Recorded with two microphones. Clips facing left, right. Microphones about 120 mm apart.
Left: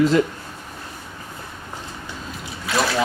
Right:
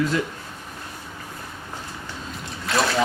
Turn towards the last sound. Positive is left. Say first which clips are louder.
# left 1 dB
turn(degrees=0)  # may be behind; listen again after turning